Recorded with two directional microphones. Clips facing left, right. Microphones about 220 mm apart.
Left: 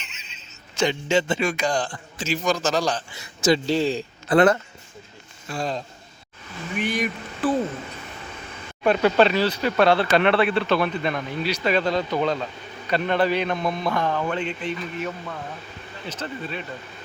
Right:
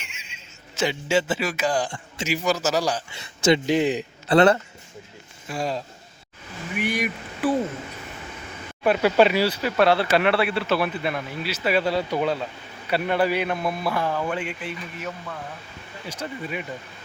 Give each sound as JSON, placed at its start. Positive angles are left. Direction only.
{"t": 0.0, "sound": "a sound", "side_deg": -10}
{"t": 1.9, "sound": "a man's voice", "side_deg": -25}
{"t": 2.3, "sound": "speech", "side_deg": -5}
{"t": 3.1, "sound": "speech", "side_deg": -20}
{"t": 5.5, "sound": "speech", "side_deg": -10}
{"t": 8.8, "sound": "speech", "side_deg": -10}
{"t": 16.0, "sound": "speech", "side_deg": -10}